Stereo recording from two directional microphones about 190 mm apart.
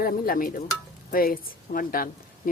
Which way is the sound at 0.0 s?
50° left (ahead or behind).